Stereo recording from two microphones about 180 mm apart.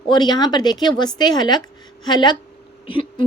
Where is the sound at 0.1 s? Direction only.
25° left (ahead or behind).